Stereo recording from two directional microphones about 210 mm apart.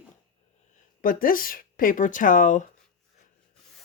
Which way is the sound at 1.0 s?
45° left (ahead or behind).